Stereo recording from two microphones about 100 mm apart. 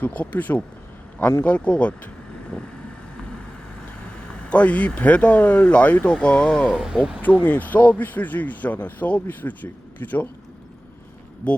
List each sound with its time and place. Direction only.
0.0 s speech: 15° left (ahead or behind)
4.4 s speech: 15° left (ahead or behind)
6.7 s speech: 5° right (ahead or behind)
7.2 s speech: 15° left (ahead or behind)